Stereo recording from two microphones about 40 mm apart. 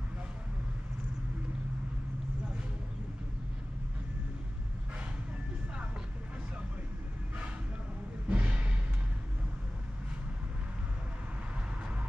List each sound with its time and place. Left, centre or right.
8.3 s music: right